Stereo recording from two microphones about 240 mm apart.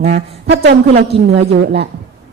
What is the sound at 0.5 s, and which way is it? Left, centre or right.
A woman's voice, right.